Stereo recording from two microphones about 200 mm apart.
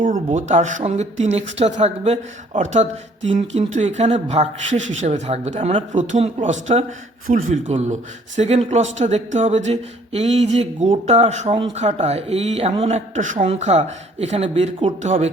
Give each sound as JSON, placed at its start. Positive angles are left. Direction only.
{"t": 0.3, "sound": "speech", "side_deg": -35}
{"t": 4.8, "sound": "speech", "side_deg": -70}
{"t": 5.0, "sound": "speech", "side_deg": -35}